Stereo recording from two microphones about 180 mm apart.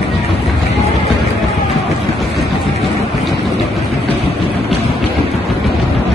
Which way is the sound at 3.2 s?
Centre (ahead or behind).